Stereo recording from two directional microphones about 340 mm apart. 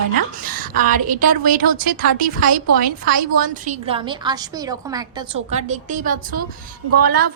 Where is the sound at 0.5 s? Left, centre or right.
Right.